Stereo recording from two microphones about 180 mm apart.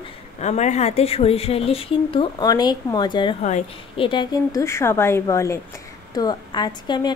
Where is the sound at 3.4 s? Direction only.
40° left (ahead or behind).